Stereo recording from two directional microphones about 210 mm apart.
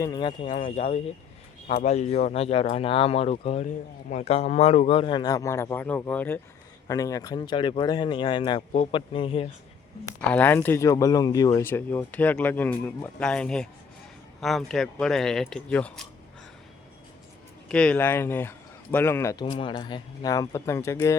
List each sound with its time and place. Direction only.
0.0 s a man's voice: 20° left (ahead or behind)
10.2 s speech: 5° left (ahead or behind)
17.7 s speech: 5° left (ahead or behind)